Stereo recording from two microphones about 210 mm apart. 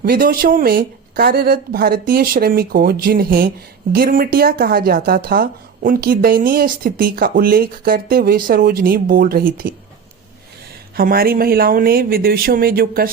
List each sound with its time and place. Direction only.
0.0 s a woman's voice: 45° right (ahead or behind)
10.9 s a woman's voice: 45° right (ahead or behind)